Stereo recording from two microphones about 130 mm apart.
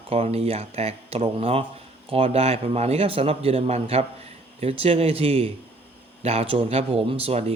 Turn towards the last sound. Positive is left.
turn(degrees=-50)  # may be behind; listen again after turning